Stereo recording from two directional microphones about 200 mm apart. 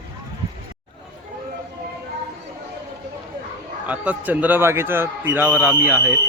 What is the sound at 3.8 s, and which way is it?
A man's voice, 5° right (ahead or behind).